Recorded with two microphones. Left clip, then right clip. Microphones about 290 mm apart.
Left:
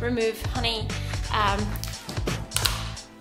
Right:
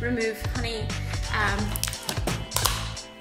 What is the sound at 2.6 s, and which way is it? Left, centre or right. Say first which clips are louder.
Music: even; right.